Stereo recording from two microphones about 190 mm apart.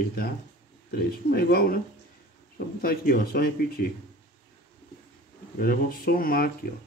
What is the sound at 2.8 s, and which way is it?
Speech, 50° left (ahead or behind).